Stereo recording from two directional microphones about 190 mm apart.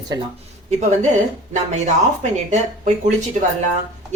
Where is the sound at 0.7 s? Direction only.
35° right (ahead or behind).